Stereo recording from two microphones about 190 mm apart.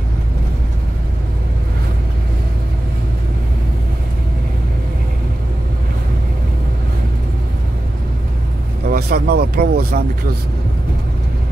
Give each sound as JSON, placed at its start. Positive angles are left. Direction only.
{"t": 8.8, "sound": "speech", "side_deg": -50}